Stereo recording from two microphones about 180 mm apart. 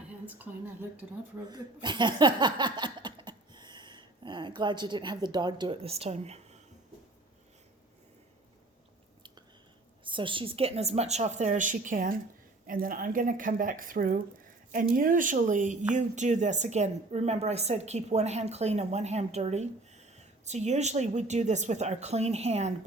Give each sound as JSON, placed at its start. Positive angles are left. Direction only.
{"t": 0.3, "sound": "a woman's voice", "side_deg": -10}
{"t": 1.5, "sound": "speech", "side_deg": -25}
{"t": 10.0, "sound": "speech", "side_deg": -25}